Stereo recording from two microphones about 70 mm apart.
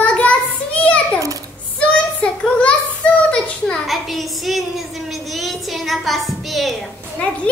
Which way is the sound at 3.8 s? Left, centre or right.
Centre.